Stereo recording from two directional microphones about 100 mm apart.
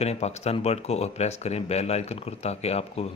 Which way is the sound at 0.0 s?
90° left.